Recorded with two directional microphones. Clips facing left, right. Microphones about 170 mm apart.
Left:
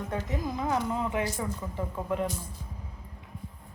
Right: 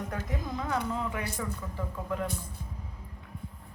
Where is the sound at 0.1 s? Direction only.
25° left (ahead or behind).